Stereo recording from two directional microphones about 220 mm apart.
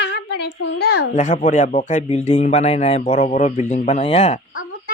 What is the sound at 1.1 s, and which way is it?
Speech, 35° left (ahead or behind).